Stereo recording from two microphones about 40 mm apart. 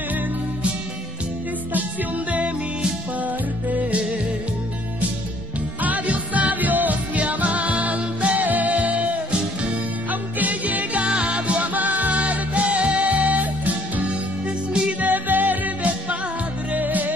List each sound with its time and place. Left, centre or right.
3.2 s music: right
3.8 s music: right
5.8 s music: right
8.5 s music: right